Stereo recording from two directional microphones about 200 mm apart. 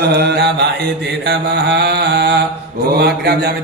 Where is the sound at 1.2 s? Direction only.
55° right (ahead or behind).